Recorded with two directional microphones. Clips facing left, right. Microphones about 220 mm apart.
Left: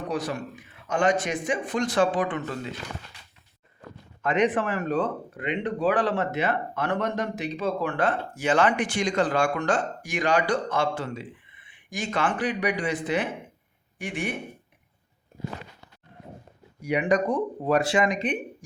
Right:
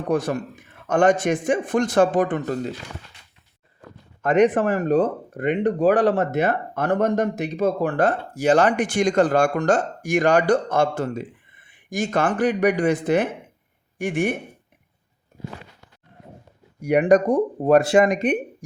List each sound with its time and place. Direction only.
0.1 s speech: 50° right (ahead or behind)
4.2 s speech: 45° right (ahead or behind)
16.8 s speech: 45° right (ahead or behind)